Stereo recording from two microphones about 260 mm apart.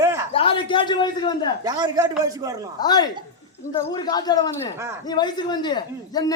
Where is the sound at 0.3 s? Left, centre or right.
Centre.